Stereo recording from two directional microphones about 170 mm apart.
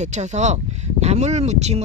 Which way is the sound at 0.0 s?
45° right (ahead or behind).